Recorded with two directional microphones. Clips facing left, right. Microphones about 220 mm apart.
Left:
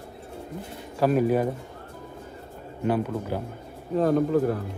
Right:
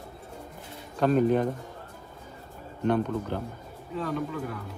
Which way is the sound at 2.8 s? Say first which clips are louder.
Even; 5° left (ahead or behind).